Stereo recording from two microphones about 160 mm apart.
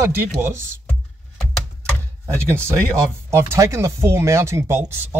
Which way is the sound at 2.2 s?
15° right (ahead or behind).